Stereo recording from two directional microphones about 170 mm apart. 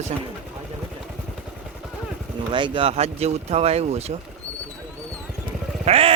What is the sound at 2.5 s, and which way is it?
Speech, 30° right (ahead or behind).